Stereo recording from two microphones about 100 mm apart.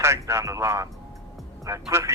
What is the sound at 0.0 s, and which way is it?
Speech, 25° right (ahead or behind).